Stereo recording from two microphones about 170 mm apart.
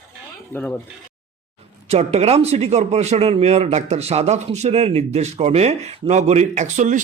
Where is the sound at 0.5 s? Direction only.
10° left (ahead or behind).